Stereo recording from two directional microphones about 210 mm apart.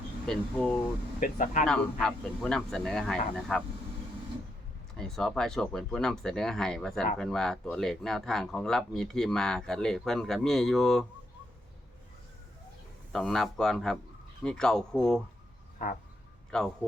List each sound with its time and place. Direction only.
0.3 s speech: 5° left (ahead or behind)
1.2 s speech: 40° left (ahead or behind)
1.6 s speech: centre (ahead or behind)
4.9 s speech: 5° left (ahead or behind)
13.1 s speech: centre (ahead or behind)
15.8 s speech: 40° left (ahead or behind)
16.5 s speech: 5° left (ahead or behind)